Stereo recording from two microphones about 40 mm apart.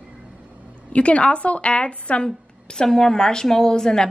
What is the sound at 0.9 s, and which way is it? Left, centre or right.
A woman's voice, left.